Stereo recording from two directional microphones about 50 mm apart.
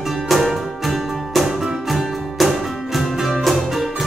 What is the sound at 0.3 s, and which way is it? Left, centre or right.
Music, centre.